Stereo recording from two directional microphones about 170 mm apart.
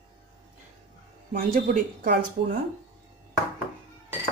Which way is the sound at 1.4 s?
50° right (ahead or behind).